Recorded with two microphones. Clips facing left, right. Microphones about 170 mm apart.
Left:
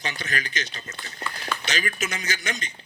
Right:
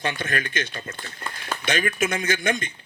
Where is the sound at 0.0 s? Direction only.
55° right (ahead or behind).